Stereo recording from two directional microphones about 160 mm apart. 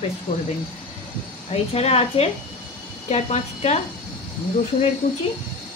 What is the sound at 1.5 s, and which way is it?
A woman's voice, 40° left (ahead or behind).